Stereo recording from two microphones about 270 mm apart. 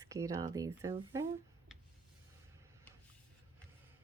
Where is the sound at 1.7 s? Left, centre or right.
Centre.